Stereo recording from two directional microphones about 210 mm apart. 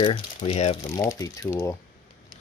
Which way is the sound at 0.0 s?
25° left (ahead or behind).